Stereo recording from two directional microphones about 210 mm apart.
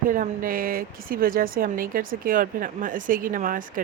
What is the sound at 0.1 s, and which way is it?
A woman's voice, 40° right (ahead or behind).